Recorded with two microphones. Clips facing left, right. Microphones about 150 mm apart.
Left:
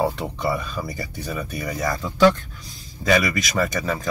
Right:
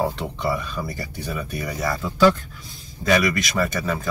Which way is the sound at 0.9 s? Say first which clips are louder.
Even; centre (ahead or behind).